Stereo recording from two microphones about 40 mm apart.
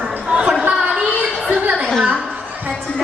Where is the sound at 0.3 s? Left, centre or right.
Right.